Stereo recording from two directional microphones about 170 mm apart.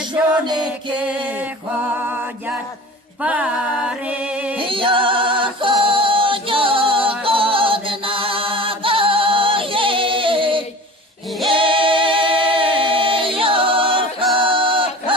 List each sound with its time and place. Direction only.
0.4 s chant: 25° right (ahead or behind)
3.2 s music: 5° right (ahead or behind)
4.6 s music: 30° right (ahead or behind)
11.5 s a capella: 30° right (ahead or behind)
14.3 s male singing: 30° right (ahead or behind)